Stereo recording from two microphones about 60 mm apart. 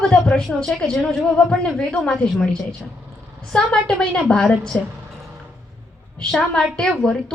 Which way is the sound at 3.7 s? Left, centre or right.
Centre.